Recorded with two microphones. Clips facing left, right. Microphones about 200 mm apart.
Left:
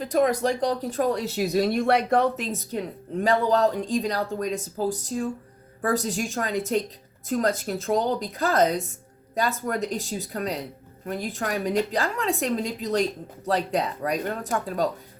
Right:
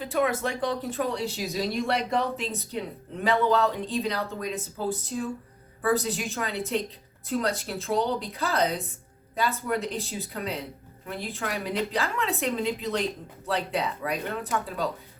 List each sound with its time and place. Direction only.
0.0 s speech: 40° left (ahead or behind); by 2.2 s 55° left (ahead or behind)
3.2 s speech: 40° left (ahead or behind)